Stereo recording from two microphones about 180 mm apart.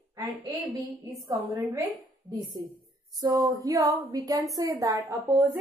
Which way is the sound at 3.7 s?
20° right (ahead or behind).